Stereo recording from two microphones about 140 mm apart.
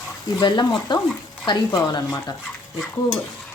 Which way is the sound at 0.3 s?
30° left (ahead or behind).